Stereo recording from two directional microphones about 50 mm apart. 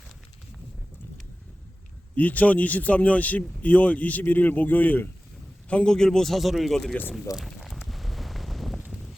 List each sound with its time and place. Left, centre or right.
2.1 s speech: left
5.6 s a man's voice: left
5.9 s speech: centre
7.3 s a sound: centre